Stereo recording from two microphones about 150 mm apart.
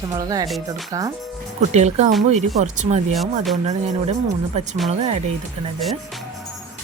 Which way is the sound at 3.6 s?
45° right (ahead or behind).